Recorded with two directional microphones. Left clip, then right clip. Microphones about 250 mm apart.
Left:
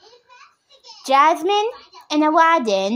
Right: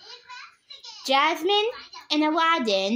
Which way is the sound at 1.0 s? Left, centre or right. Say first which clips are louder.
Left 7 dB; centre.